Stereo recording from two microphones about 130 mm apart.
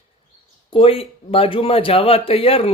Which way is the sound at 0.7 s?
45° left (ahead or behind).